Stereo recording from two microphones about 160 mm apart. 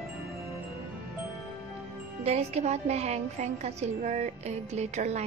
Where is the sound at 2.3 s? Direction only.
40° right (ahead or behind).